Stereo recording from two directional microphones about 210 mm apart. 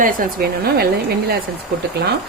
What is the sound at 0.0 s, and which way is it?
Speech, 45° right (ahead or behind).